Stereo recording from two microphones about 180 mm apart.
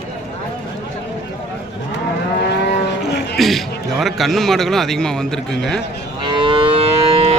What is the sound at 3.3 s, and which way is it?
Speech, centre (ahead or behind).